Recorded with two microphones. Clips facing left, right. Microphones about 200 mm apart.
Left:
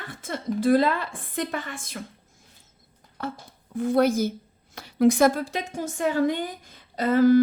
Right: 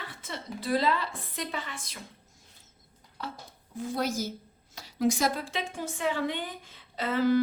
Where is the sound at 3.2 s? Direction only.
50° left (ahead or behind).